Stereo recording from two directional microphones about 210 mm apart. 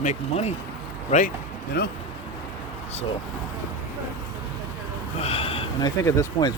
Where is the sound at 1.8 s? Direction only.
50° left (ahead or behind).